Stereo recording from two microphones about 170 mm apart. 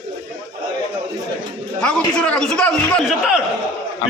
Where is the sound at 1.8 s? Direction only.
5° left (ahead or behind).